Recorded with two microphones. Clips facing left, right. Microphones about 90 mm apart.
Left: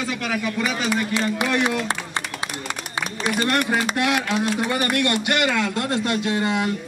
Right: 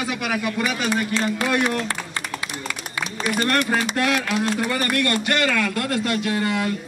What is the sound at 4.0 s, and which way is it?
A man's voice, 20° left (ahead or behind).